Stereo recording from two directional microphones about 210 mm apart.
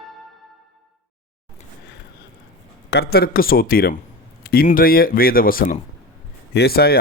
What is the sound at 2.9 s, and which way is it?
Speech, 50° left (ahead or behind).